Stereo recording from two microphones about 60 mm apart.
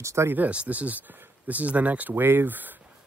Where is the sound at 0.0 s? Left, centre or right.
Right.